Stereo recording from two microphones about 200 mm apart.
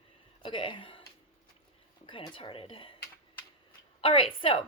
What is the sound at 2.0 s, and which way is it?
Speech, 25° left (ahead or behind).